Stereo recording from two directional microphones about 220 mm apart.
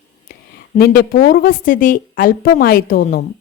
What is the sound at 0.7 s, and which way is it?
Speech, 45° left (ahead or behind).